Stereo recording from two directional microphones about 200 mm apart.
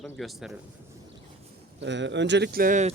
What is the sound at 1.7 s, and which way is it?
Speech, 65° right (ahead or behind).